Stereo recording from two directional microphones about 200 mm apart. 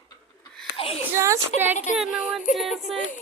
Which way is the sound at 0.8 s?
30° left (ahead or behind).